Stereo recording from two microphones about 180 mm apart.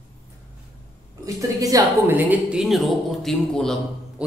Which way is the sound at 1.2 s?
20° right (ahead or behind).